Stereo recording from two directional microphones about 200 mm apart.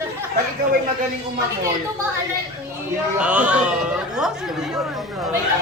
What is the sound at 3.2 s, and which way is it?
Speech, 5° right (ahead or behind).